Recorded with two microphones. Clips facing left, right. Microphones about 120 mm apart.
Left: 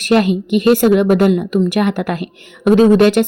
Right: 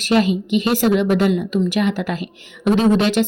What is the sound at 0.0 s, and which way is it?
A woman's voice, 55° left (ahead or behind).